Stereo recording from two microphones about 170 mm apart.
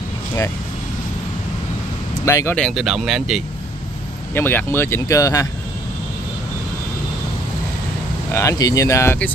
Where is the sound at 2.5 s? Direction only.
Centre (ahead or behind).